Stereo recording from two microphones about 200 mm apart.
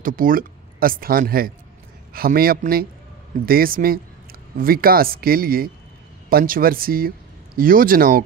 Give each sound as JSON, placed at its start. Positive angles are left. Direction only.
{"t": 0.0, "sound": "speech", "side_deg": -45}